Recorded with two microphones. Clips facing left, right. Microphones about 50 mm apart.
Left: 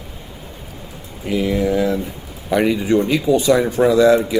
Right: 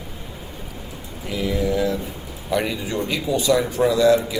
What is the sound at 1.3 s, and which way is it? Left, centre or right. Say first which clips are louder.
Speech: left 7 dB; left.